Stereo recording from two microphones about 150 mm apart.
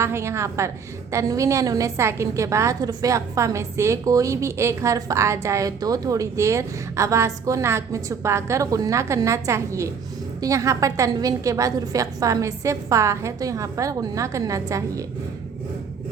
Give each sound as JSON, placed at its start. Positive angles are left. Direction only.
{"t": 0.0, "sound": "a woman's voice", "side_deg": -20}